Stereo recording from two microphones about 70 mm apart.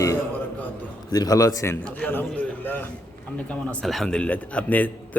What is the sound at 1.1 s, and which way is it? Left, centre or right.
Speech, left.